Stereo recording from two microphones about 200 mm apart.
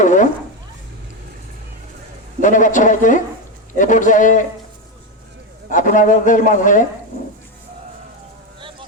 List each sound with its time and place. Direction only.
0.0 s a sound: 40° left (ahead or behind)
2.4 s a man's voice: 40° left (ahead or behind)
5.7 s a man's voice: 40° left (ahead or behind)